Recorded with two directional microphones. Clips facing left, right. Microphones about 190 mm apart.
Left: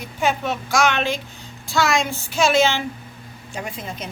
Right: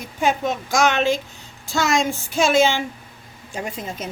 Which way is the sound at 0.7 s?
40° right (ahead or behind).